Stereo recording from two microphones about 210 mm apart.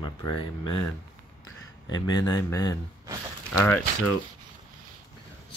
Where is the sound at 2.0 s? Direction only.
20° left (ahead or behind).